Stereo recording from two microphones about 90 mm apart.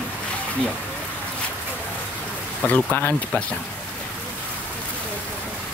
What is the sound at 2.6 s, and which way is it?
Speech, 20° left (ahead or behind).